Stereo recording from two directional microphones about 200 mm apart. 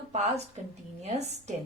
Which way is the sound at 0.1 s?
35° right (ahead or behind).